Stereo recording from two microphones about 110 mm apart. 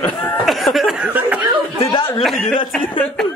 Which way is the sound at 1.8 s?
50° left (ahead or behind).